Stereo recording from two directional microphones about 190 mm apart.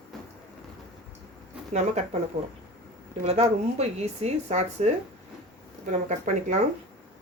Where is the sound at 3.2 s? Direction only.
35° right (ahead or behind).